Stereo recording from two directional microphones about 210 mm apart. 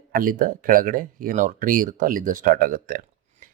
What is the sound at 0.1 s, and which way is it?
Speech, 40° right (ahead or behind).